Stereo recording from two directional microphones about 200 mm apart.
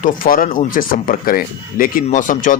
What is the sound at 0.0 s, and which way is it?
Speech, 45° left (ahead or behind).